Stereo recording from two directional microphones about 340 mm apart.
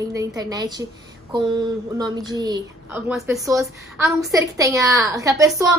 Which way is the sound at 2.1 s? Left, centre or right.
Centre.